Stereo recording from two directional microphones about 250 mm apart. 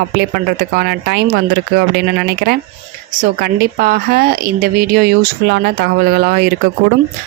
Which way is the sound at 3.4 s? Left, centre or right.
Right.